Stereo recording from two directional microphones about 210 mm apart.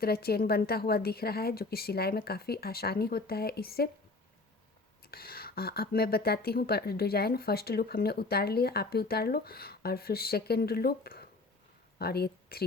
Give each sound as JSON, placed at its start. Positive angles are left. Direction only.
{"t": 0.0, "sound": "speech", "side_deg": 50}
{"t": 5.1, "sound": "speech", "side_deg": 45}